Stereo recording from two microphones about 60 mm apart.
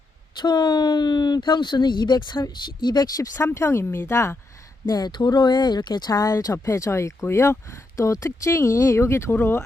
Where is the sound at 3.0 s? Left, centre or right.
Left.